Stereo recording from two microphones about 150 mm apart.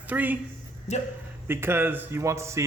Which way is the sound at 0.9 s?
50° left (ahead or behind).